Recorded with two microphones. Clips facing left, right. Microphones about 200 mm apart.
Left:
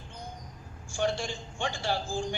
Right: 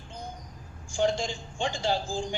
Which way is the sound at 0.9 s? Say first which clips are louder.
Right 3 dB; 15° right (ahead or behind).